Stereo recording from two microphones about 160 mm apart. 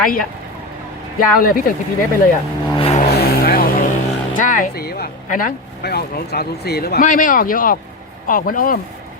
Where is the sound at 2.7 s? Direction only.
35° left (ahead or behind).